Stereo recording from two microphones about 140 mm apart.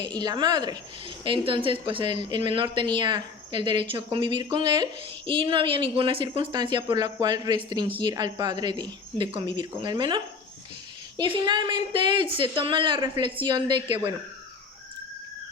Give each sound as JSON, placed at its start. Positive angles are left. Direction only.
{"t": 0.2, "sound": "a woman's voice", "side_deg": -30}
{"t": 11.2, "sound": "a woman's voice", "side_deg": -30}